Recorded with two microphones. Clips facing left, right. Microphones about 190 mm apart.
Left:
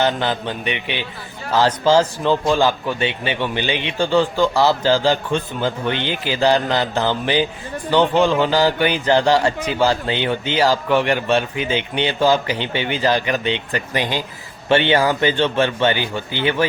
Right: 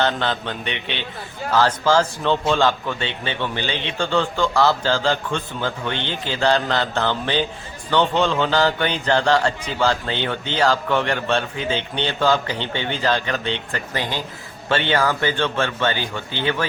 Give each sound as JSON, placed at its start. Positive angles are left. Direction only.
{"t": 0.0, "sound": "a man's voice", "side_deg": 10}